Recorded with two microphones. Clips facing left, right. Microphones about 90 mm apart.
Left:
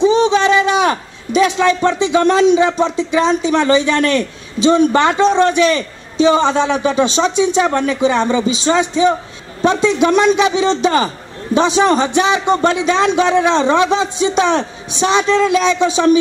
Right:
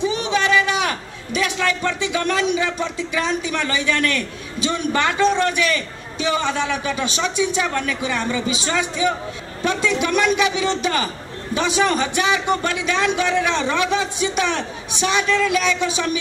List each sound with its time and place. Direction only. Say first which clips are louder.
0.0 s a man's voice: left 9 dB; 25° left (ahead or behind)